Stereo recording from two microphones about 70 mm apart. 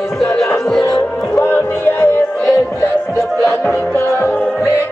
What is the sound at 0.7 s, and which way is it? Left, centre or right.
Music, centre.